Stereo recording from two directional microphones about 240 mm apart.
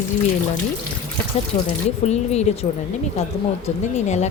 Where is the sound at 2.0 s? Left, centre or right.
Left.